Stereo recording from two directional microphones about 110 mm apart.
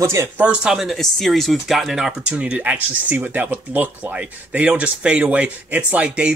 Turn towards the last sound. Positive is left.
turn(degrees=-10)  # may be behind; listen again after turning